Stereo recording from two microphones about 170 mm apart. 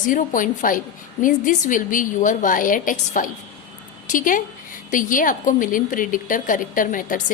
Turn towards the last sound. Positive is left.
turn(degrees=50)  # may be behind; listen again after turning